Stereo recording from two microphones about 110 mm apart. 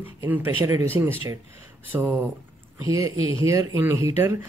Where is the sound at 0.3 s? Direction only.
25° right (ahead or behind).